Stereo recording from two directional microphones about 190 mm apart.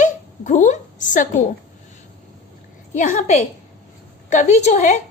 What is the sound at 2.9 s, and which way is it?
A woman's voice, 40° left (ahead or behind).